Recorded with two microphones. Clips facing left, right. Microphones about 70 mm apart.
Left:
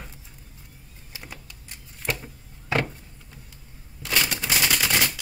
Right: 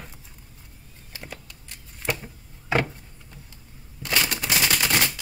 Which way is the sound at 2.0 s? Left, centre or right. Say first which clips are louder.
Right 1 dB; centre.